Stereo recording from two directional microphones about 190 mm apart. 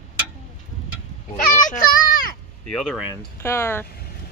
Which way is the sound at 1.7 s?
45° left (ahead or behind).